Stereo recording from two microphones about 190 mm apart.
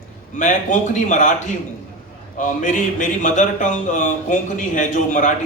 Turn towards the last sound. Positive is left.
turn(degrees=40)  # may be behind; listen again after turning